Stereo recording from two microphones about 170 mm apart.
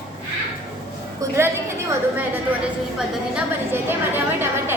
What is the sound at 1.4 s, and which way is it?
Speech, 15° right (ahead or behind).